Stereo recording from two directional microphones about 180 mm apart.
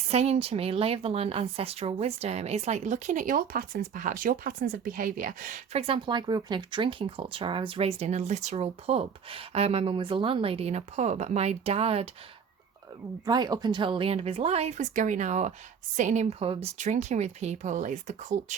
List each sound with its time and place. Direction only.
0.1 s speech: 35° right (ahead or behind)
5.8 s speech: 30° right (ahead or behind)
13.2 s speech: 20° right (ahead or behind); by 18.5 s 40° right (ahead or behind)